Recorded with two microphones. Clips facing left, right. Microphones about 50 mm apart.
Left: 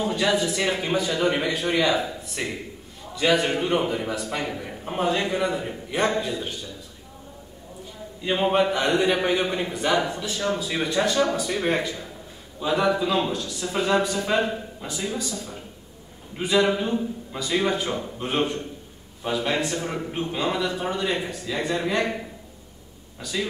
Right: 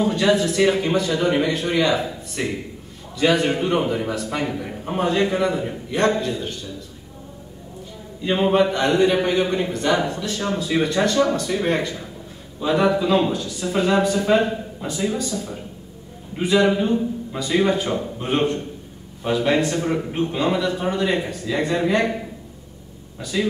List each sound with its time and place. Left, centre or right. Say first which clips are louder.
0.0 s a man's voice: right 4 dB; centre
8.2 s a man's voice: right 3 dB; centre
12.5 s a man's voice: right 3 dB; centre
15.1 s a man's voice: right 5 dB; centre
21.5 s a man's voice: right 5 dB; centre
23.3 s a man's voice: right 6 dB; centre